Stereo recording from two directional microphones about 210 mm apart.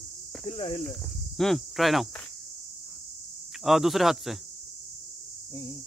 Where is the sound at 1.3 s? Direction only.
Centre (ahead or behind).